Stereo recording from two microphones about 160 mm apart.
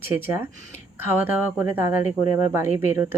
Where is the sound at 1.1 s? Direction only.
10° right (ahead or behind).